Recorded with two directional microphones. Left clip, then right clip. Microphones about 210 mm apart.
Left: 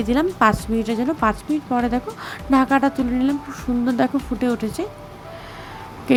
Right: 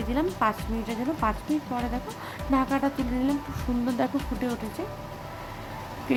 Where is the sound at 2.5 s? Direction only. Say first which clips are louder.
Left 8 dB; 25° left (ahead or behind).